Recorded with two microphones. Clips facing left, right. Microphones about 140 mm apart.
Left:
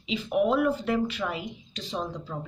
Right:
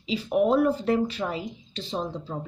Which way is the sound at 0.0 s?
35° right (ahead or behind).